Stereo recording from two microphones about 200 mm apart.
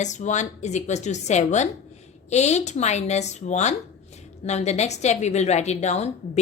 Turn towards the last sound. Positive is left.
turn(degrees=35)  # may be behind; listen again after turning